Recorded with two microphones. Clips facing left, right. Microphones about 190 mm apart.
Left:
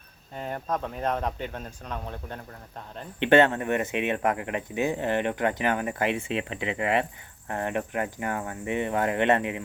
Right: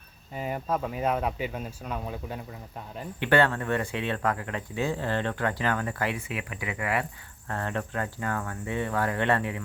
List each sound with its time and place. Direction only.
0.3 s speech: 5° right (ahead or behind)
3.2 s speech: 20° left (ahead or behind)